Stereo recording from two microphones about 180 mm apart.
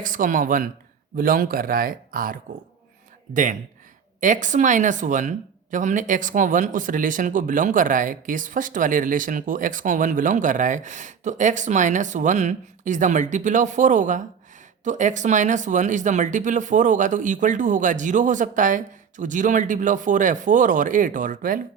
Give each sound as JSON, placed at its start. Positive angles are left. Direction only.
{"t": 0.0, "sound": "speech", "side_deg": -50}